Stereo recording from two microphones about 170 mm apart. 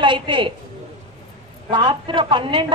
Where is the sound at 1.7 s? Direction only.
30° right (ahead or behind).